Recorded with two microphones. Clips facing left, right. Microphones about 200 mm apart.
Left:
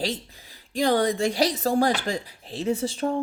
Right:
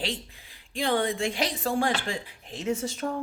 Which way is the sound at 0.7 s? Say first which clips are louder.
Left 5 dB; 40° left (ahead or behind).